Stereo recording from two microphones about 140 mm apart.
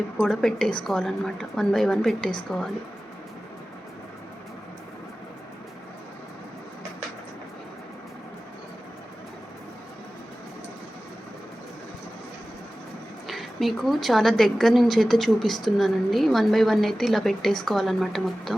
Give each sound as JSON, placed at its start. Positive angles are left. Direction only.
{"t": 0.2, "sound": "a woman's voice", "side_deg": 5}
{"t": 13.2, "sound": "a woman's voice", "side_deg": 0}